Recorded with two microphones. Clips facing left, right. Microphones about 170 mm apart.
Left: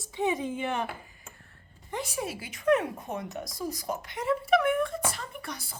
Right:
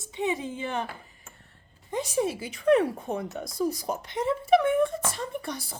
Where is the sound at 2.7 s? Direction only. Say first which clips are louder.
Right 4 dB; 30° right (ahead or behind).